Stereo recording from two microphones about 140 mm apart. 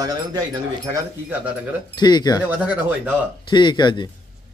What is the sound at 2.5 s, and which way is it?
Speech, 10° right (ahead or behind).